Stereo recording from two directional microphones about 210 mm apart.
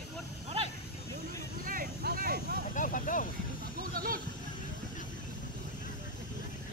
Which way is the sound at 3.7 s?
45° right (ahead or behind).